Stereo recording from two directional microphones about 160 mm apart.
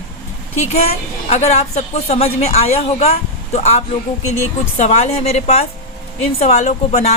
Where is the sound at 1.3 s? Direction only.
45° left (ahead or behind).